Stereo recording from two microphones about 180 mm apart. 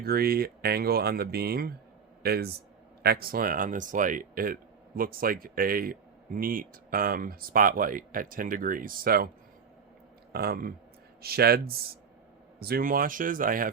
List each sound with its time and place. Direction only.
0.0 s speech: 60° right (ahead or behind)
10.3 s speech: 60° right (ahead or behind)